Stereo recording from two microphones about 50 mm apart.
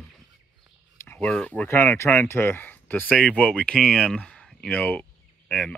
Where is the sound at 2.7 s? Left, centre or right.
Left.